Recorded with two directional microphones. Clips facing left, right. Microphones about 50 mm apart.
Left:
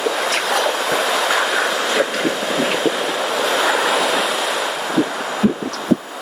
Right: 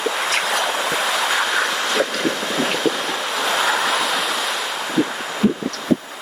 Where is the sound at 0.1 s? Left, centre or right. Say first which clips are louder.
Left 1 dB; centre.